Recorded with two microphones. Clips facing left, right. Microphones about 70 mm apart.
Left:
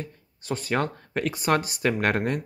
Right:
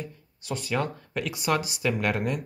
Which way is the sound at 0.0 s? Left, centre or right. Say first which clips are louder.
Left 1 dB; left.